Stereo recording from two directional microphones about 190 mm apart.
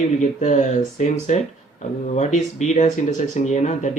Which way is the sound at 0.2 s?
40° left (ahead or behind).